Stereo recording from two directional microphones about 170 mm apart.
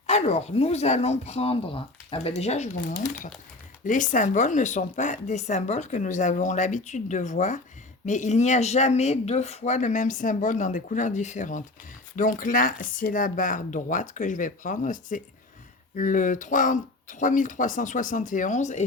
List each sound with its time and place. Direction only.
0.1 s a woman's voice: 40° left (ahead or behind)